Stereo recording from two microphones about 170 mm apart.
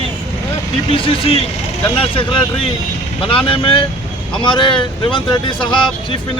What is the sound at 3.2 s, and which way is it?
Speech, 30° left (ahead or behind).